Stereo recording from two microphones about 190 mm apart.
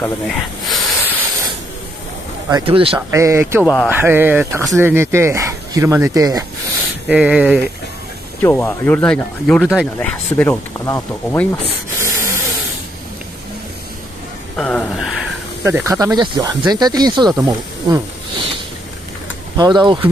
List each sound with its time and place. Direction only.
0.0 s snake: 5° left (ahead or behind)
2.5 s speech: 30° right (ahead or behind)
3.1 s speech: 15° right (ahead or behind)
3.6 s speech: 10° left (ahead or behind)
3.9 s speech: 10° right (ahead or behind)
7.1 s speech: 5° right (ahead or behind)
8.4 s speech: 10° left (ahead or behind)
12.0 s a sound: 15° right (ahead or behind)
14.6 s a sound: 5° left (ahead or behind)
15.6 s speech: 15° right (ahead or behind)
19.5 s speech: 25° right (ahead or behind)